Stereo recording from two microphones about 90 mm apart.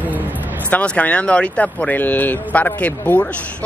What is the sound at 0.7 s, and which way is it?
Speech, 15° left (ahead or behind).